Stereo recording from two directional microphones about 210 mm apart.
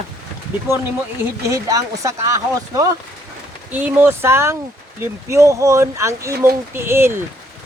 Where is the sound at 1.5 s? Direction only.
15° right (ahead or behind).